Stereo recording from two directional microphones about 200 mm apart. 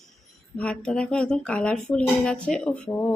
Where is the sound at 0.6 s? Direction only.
5° left (ahead or behind).